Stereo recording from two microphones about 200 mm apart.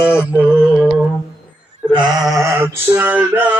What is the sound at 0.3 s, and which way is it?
Mantra, 5° right (ahead or behind).